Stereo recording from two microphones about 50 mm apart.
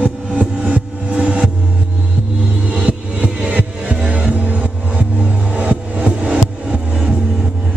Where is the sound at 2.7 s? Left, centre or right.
Right.